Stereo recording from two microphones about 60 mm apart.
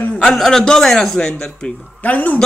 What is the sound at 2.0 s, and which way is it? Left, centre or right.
Speech, left.